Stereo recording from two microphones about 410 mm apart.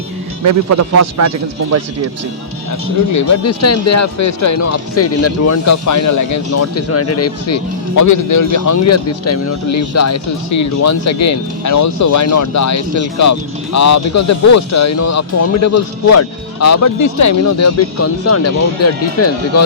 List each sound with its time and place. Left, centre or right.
0.4 s speech: right
3.1 s speech: left